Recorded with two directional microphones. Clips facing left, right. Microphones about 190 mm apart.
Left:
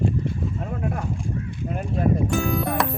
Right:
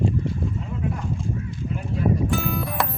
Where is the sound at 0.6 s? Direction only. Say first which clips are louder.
Left 1 dB; 55° left (ahead or behind).